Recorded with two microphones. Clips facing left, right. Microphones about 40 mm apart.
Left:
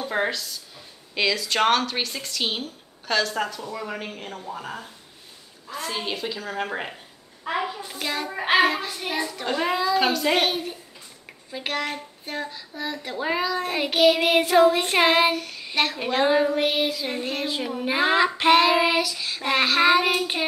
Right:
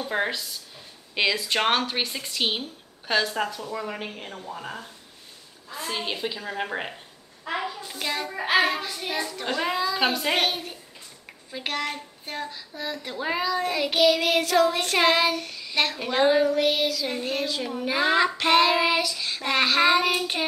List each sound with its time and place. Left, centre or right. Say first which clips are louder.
0.3 s a woman's voice: left 1 dB; centre
3.3 s child singing: even; centre
5.8 s a woman's voice: left 1 dB; centre
7.4 s child singing: left 3 dB; centre
13.9 s child singing: left 3 dB; left
15.7 s a woman's voice: left 1 dB; centre
16.1 s child singing: right 1 dB; centre
16.4 s child singing: even; centre